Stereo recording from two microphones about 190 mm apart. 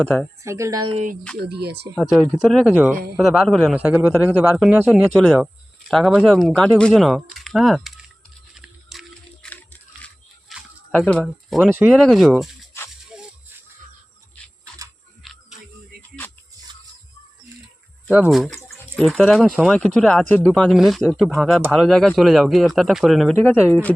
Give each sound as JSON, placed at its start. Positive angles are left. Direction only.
{"t": 0.4, "sound": "speech", "side_deg": -15}
{"t": 1.4, "sound": "speech", "side_deg": -60}
{"t": 2.0, "sound": "speech", "side_deg": 0}
{"t": 2.9, "sound": "speech", "side_deg": -50}
{"t": 3.2, "sound": "speech", "side_deg": 0}
{"t": 3.8, "sound": "speech", "side_deg": -10}
{"t": 5.0, "sound": "speech", "side_deg": 5}
{"t": 8.5, "sound": "a sound", "side_deg": 0}
{"t": 10.9, "sound": "speech", "side_deg": 10}
{"t": 11.2, "sound": "speech", "side_deg": -5}
{"t": 13.1, "sound": "music", "side_deg": -5}
{"t": 15.2, "sound": "music", "side_deg": 0}
{"t": 18.1, "sound": "speech", "side_deg": -5}